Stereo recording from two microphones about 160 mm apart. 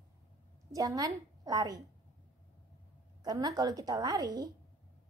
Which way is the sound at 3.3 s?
25° right (ahead or behind).